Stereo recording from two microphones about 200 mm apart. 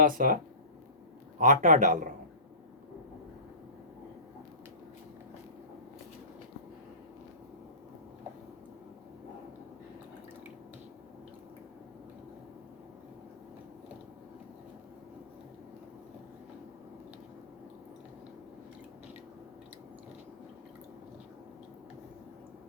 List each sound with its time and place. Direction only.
0.0 s speech: 45° right (ahead or behind)
1.4 s a man's voice: 40° right (ahead or behind)